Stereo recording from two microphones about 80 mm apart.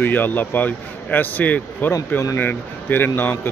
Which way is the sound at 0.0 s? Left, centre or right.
Left.